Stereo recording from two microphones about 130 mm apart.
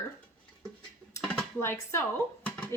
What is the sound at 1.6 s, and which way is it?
Speech, 20° left (ahead or behind).